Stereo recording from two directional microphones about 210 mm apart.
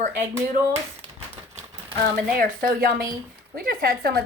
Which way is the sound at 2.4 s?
45° right (ahead or behind).